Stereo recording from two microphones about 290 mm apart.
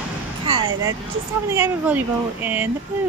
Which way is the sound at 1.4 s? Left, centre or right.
Centre.